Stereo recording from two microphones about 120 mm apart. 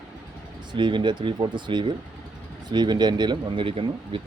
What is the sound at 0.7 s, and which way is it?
Speech, 40° right (ahead or behind).